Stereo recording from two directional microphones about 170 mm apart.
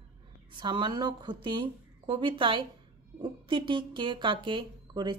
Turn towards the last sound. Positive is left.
turn(degrees=-25)  # may be behind; listen again after turning